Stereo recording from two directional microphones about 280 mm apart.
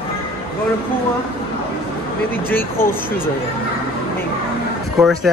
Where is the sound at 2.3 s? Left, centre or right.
Centre.